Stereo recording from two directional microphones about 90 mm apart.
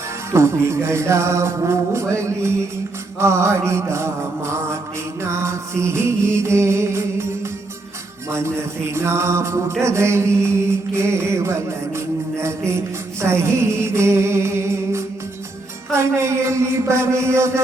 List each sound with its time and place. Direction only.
0.3 s music: 30° right (ahead or behind)